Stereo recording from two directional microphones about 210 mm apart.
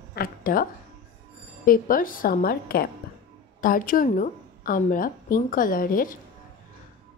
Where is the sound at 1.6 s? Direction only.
40° left (ahead or behind).